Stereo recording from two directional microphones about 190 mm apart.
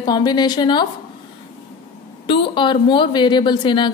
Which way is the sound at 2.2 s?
25° left (ahead or behind).